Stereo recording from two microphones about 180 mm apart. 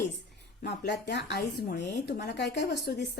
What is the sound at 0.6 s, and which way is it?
A woman's voice, 65° left (ahead or behind).